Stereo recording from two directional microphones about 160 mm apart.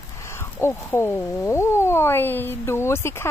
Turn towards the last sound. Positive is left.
turn(degrees=15)  # may be behind; listen again after turning